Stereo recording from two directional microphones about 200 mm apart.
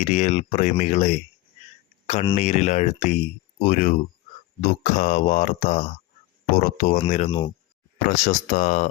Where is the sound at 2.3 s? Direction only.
35° left (ahead or behind).